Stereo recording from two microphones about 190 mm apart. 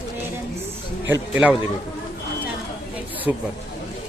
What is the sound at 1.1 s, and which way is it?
Speech, 10° right (ahead or behind).